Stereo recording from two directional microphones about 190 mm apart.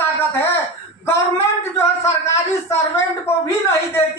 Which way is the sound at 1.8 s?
15° left (ahead or behind).